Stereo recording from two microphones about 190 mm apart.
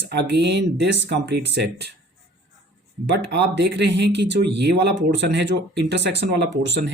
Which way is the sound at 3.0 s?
65° right (ahead or behind).